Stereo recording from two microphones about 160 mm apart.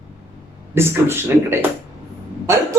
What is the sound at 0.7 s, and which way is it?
Speech, 15° right (ahead or behind).